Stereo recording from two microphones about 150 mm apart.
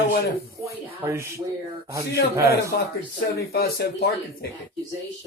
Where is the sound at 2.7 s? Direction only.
90° left.